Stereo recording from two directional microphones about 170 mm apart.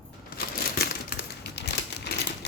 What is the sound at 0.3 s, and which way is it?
Crumpling, 65° left (ahead or behind).